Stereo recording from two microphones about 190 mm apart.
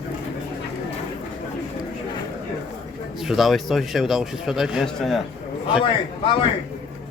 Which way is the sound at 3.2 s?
Centre (ahead or behind).